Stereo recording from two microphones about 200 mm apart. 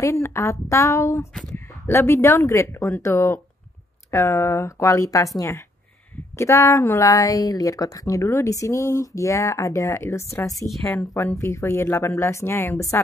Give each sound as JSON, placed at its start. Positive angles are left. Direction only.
{"t": 0.0, "sound": "speech", "side_deg": 15}
{"t": 6.3, "sound": "speech", "side_deg": 15}